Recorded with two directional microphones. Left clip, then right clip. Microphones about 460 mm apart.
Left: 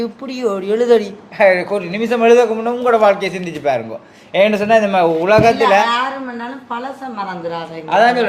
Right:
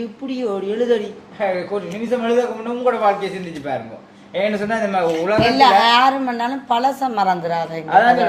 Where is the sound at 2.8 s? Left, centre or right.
Centre.